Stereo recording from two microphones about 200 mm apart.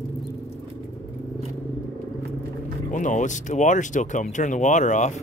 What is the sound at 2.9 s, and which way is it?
Speech, 40° left (ahead or behind).